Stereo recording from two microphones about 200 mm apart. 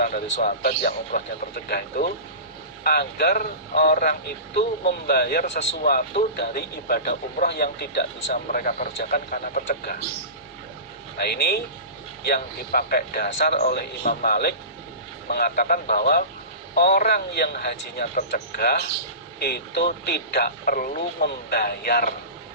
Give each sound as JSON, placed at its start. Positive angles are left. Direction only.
{"t": 0.0, "sound": "speech", "side_deg": 45}
{"t": 11.2, "sound": "speech", "side_deg": 50}